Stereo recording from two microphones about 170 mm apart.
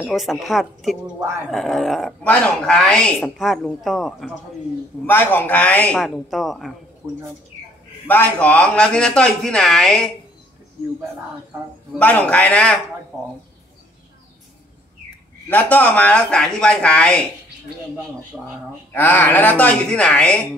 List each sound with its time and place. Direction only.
0.0 s speech: centre (ahead or behind)
5.0 s a man's voice: 10° left (ahead or behind)
7.0 s speech: 20° right (ahead or behind)
8.1 s speech: 10° left (ahead or behind)
12.0 s a man's voice: 10° left (ahead or behind)
15.5 s a man's voice: 10° left (ahead or behind)
18.3 s speech: 10° right (ahead or behind)
18.9 s a man's voice: 10° left (ahead or behind)